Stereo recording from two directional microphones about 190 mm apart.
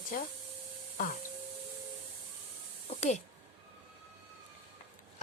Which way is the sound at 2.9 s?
40° left (ahead or behind).